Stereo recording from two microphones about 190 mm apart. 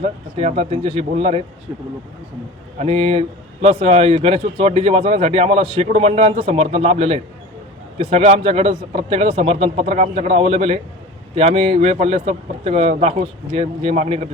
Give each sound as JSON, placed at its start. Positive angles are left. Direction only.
{"t": 0.0, "sound": "speech", "side_deg": -35}
{"t": 2.7, "sound": "speech", "side_deg": -30}